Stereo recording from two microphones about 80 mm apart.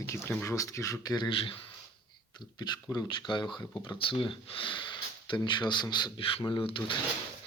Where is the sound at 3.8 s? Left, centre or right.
Left.